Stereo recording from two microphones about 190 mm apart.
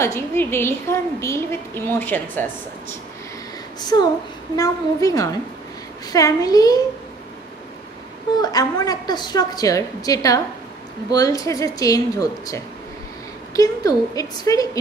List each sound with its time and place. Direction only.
0.0 s speech: 15° left (ahead or behind)
4.6 s a woman's voice: 20° left (ahead or behind)
8.4 s a woman's voice: 20° left (ahead or behind)